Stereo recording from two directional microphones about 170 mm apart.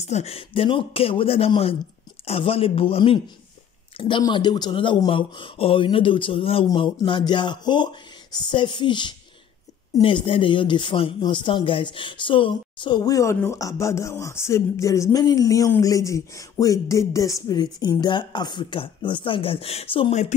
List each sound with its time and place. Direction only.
0.0 s speech: 40° left (ahead or behind)
4.2 s speech: 25° left (ahead or behind)